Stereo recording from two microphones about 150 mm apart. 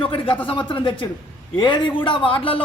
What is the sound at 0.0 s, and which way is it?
A man's voice, 35° left (ahead or behind).